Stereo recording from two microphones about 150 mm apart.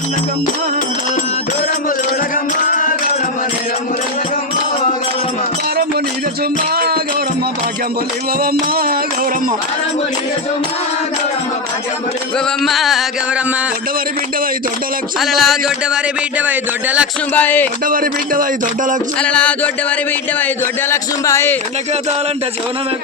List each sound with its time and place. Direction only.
6.7 s music: 90° right
8.7 s music: 90° right
12.6 s a sound: centre (ahead or behind)
15.2 s a sound: centre (ahead or behind)
16.5 s speech: 10° right (ahead or behind)
17.3 s a man's voice: 10° left (ahead or behind)
17.8 s speech: 70° right (ahead or behind)
19.2 s a man's voice: 10° left (ahead or behind)
20.9 s a man's voice: 20° left (ahead or behind)